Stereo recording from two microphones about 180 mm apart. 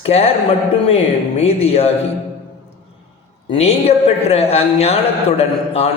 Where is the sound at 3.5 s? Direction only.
35° left (ahead or behind).